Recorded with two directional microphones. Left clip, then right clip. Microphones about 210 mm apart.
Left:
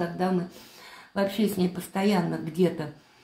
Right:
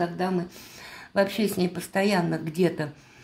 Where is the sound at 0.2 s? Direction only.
35° right (ahead or behind).